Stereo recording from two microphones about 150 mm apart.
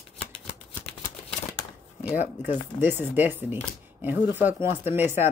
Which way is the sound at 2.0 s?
10° right (ahead or behind).